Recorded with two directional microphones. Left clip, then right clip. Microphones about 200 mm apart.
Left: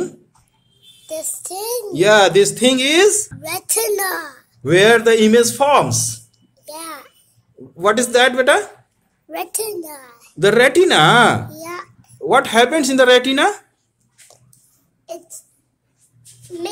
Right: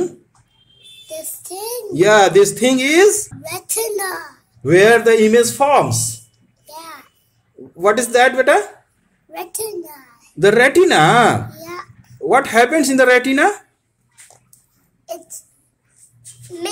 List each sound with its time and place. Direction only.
1.0 s a child's voice: 35° left (ahead or behind)
2.0 s speech: 10° right (ahead or behind)
3.4 s a child's voice: 45° left (ahead or behind)
4.6 s a man's voice: 10° right (ahead or behind)
6.6 s a sound: 45° left (ahead or behind)
7.7 s speech: 10° right (ahead or behind)
9.3 s a child's voice: 50° left (ahead or behind)
10.4 s speech: 10° right (ahead or behind)
11.4 s babbling: 40° left (ahead or behind)
12.3 s speech: 10° right (ahead or behind)